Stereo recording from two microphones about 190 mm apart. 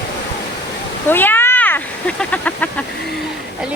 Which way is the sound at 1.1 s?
10° left (ahead or behind).